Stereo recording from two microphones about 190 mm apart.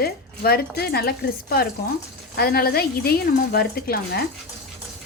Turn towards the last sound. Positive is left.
turn(degrees=55)  # may be behind; listen again after turning